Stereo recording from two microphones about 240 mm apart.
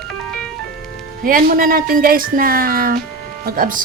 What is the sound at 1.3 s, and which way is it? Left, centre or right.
Speech, right.